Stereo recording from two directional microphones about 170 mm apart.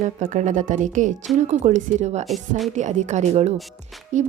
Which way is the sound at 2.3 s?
Centre (ahead or behind).